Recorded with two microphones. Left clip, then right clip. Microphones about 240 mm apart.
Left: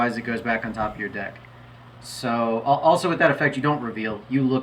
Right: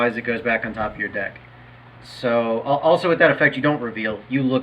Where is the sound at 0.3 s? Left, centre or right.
Centre.